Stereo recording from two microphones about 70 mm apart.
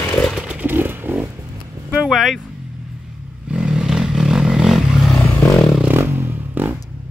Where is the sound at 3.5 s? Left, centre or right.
Centre.